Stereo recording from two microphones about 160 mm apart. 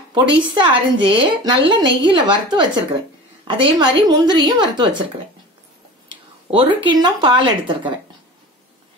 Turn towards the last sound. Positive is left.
turn(degrees=-30)  # may be behind; listen again after turning